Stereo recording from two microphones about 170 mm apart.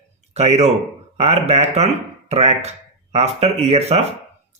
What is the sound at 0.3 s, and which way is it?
Speech, 40° right (ahead or behind).